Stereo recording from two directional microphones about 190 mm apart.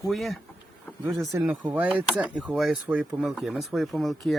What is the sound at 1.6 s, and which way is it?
Speech, 10° right (ahead or behind).